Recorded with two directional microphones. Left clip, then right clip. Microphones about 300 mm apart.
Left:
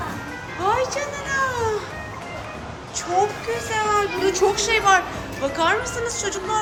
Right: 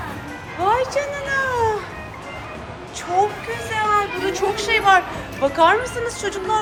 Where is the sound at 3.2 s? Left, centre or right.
Centre.